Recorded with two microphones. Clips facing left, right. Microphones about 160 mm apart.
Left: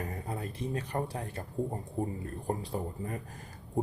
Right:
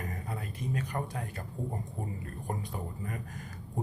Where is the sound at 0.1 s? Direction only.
30° left (ahead or behind).